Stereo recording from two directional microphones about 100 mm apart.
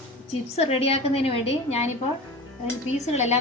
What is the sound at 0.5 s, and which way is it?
A woman's voice, 90° left.